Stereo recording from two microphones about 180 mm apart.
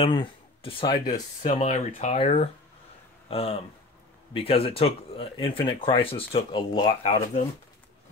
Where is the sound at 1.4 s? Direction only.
40° left (ahead or behind).